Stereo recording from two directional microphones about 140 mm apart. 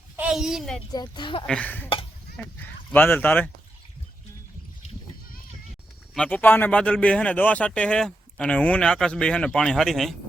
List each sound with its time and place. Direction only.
0.2 s a child's voice: 5° right (ahead or behind)
0.9 s speech: 35° left (ahead or behind)
1.5 s a man's voice: 10° left (ahead or behind)
6.1 s a man's voice: 10° left (ahead or behind)